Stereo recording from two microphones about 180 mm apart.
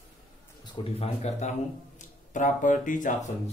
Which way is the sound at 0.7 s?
30° left (ahead or behind).